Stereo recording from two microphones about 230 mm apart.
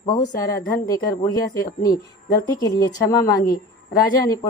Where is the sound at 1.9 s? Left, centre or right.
Left.